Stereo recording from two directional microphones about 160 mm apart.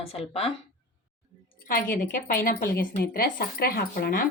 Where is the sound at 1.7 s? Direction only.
60° left (ahead or behind).